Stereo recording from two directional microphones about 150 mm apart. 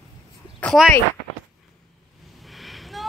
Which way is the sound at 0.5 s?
5° left (ahead or behind).